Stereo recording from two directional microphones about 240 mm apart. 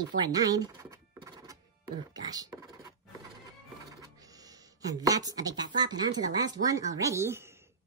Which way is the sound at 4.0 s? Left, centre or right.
Centre.